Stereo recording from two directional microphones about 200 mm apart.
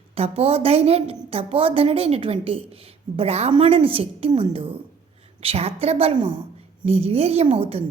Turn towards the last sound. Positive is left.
turn(degrees=-30)  # may be behind; listen again after turning